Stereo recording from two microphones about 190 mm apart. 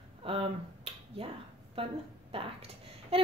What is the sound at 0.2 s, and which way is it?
Finger snapping, 30° right (ahead or behind).